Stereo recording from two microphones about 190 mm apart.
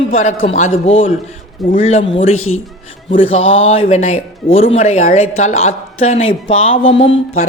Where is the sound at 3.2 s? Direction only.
30° left (ahead or behind).